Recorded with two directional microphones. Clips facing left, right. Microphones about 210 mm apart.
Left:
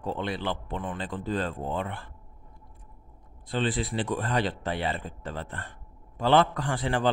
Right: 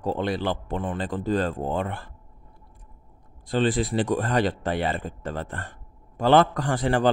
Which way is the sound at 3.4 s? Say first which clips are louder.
Right 5 dB; 45° right (ahead or behind).